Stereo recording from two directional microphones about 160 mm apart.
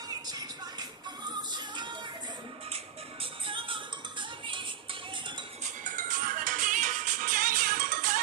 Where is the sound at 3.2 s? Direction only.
35° right (ahead or behind).